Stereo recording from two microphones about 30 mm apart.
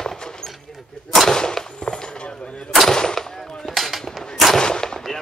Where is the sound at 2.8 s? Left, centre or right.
Centre.